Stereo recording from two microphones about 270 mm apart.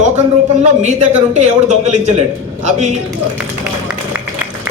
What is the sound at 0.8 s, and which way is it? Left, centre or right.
A man's voice, right.